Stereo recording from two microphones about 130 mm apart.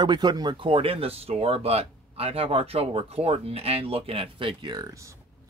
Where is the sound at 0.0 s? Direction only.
35° right (ahead or behind).